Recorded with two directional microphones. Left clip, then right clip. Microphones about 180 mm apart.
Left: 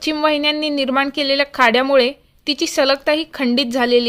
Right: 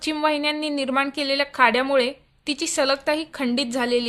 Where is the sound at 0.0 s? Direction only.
35° left (ahead or behind).